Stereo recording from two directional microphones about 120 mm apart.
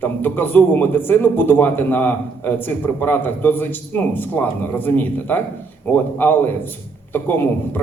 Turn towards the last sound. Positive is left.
turn(degrees=15)  # may be behind; listen again after turning